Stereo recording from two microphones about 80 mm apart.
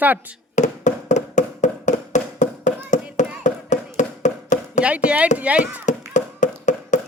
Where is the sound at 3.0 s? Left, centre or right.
Centre.